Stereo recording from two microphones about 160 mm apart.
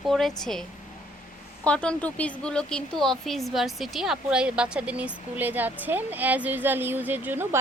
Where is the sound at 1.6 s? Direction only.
5° left (ahead or behind).